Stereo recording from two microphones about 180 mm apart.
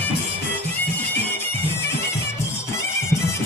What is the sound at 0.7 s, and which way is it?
Music, 10° left (ahead or behind).